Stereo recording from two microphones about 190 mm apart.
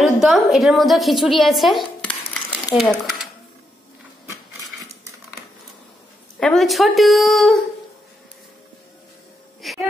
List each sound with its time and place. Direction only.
0.0 s a woman's voice: centre (ahead or behind)
2.7 s speech: centre (ahead or behind)
6.4 s speech: centre (ahead or behind)
9.6 s a sound: centre (ahead or behind)